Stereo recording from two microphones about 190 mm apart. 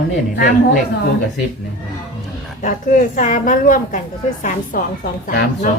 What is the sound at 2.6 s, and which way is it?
A woman's voice, 40° left (ahead or behind).